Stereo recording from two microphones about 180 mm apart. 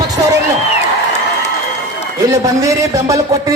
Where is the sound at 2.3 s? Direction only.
20° right (ahead or behind).